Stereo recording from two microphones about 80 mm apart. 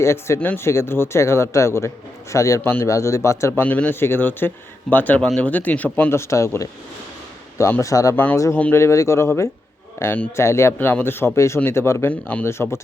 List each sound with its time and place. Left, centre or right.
0.0 s speech: left
0.3 s speech: left
0.6 s speech: left
3.5 s speech: centre
6.1 s speech: left
7.8 s speech: left
8.1 s speech: left
8.7 s speech: left
10.8 s speech: left
12.0 s speech: centre
12.5 s speech: left